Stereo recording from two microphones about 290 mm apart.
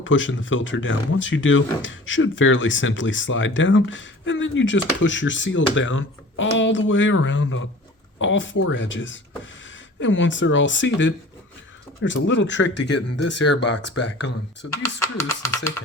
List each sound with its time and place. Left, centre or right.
0.0 s speech: left
14.8 s speech: centre